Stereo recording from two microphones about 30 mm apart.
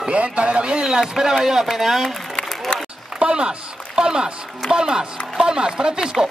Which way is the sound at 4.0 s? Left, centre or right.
Right.